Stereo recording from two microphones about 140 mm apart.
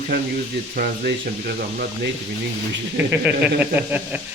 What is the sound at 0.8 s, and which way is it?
Speech, 90° right.